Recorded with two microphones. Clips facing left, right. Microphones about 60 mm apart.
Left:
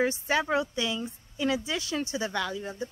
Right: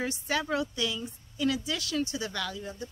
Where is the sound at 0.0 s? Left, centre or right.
Left.